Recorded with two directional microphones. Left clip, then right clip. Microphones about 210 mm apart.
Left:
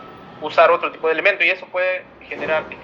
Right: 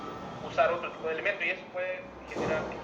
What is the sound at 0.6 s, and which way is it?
A man's voice, 45° left (ahead or behind).